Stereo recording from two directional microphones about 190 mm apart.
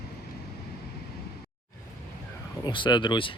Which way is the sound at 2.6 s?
25° left (ahead or behind).